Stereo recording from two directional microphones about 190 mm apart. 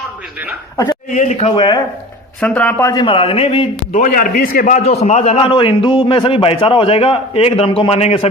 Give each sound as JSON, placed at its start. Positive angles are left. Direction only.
{"t": 1.1, "sound": "a man's voice", "side_deg": 35}
{"t": 2.4, "sound": "a man's voice", "side_deg": 10}
{"t": 4.0, "sound": "a man's voice", "side_deg": 45}